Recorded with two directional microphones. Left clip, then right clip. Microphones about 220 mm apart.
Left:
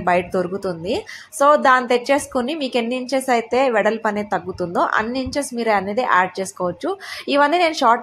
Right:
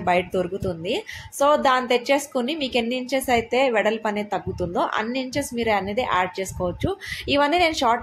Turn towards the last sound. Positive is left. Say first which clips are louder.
# left 4 dB
turn(degrees=10)  # may be behind; listen again after turning